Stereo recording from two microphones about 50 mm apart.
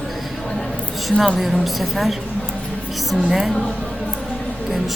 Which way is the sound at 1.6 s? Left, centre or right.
Centre.